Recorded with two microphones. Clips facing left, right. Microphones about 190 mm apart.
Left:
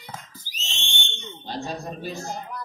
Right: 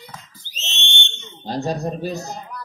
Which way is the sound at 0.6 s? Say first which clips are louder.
Right 4 dB; 25° right (ahead or behind).